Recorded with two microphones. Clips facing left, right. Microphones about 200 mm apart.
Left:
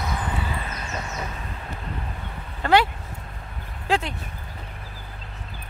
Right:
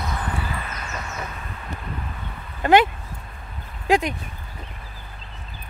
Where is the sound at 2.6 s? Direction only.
20° right (ahead or behind).